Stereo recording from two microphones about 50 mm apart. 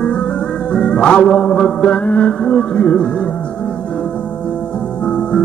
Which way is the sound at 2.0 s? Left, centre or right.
Left.